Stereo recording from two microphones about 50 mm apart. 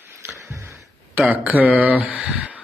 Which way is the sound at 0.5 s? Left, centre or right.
Right.